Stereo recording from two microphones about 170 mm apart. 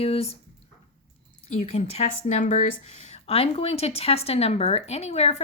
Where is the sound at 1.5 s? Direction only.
40° left (ahead or behind).